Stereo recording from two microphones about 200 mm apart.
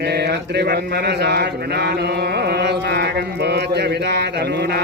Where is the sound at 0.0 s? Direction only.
55° right (ahead or behind).